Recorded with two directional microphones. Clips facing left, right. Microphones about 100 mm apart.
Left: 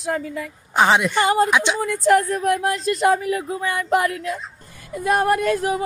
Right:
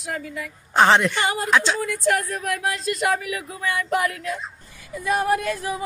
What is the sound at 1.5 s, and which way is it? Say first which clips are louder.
Speech: even; 15° left (ahead or behind).